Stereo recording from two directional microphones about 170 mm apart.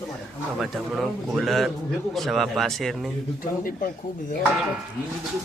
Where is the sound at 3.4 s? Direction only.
55° left (ahead or behind).